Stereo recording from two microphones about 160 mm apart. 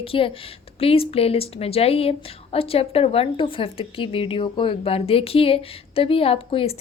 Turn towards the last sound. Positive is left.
turn(degrees=35)  # may be behind; listen again after turning